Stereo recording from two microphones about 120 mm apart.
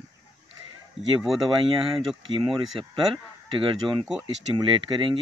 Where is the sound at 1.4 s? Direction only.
45° right (ahead or behind).